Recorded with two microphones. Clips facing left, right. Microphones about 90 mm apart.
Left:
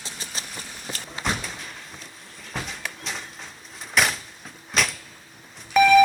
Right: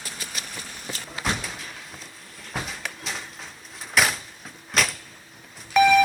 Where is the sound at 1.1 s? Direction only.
Centre (ahead or behind).